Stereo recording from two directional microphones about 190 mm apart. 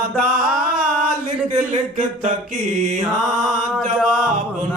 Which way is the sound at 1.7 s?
40° right (ahead or behind).